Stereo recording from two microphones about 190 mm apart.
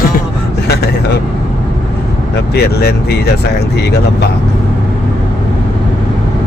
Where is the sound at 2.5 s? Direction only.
60° left (ahead or behind).